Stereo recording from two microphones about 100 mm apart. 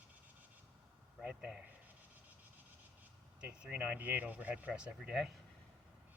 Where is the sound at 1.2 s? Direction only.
10° right (ahead or behind).